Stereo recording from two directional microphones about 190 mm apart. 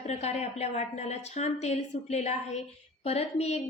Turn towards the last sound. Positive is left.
turn(degrees=35)  # may be behind; listen again after turning